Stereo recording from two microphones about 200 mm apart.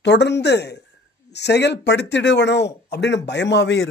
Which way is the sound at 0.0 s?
60° left (ahead or behind).